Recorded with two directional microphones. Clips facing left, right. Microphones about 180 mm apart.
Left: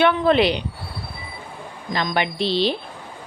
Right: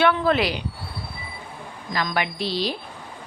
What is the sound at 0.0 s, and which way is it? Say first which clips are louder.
Speech: left 3 dB; 20° left (ahead or behind).